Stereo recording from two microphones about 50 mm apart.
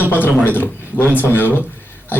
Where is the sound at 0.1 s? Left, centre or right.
Left.